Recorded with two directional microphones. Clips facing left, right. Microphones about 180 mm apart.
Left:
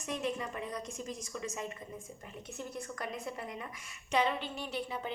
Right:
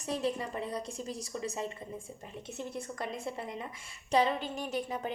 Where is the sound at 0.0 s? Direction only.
30° right (ahead or behind).